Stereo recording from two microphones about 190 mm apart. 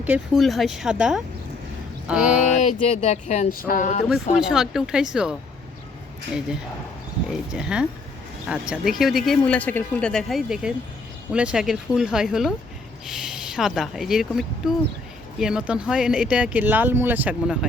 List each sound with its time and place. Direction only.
0.0 s speech: 5° right (ahead or behind)
2.6 s a sound: 35° left (ahead or behind)
4.4 s speech: 5° right (ahead or behind)
7.3 s speech: 5° right (ahead or behind)